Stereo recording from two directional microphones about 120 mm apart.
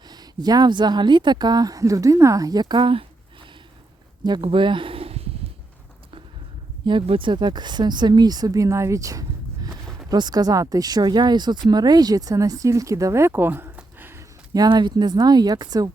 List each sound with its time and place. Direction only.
0.1 s speech: 35° right (ahead or behind)
4.2 s speech: 40° right (ahead or behind)
4.4 s a sound: 45° right (ahead or behind)
6.8 s speech: 45° right (ahead or behind); by 14.3 s 20° right (ahead or behind)
14.5 s speech: 35° right (ahead or behind)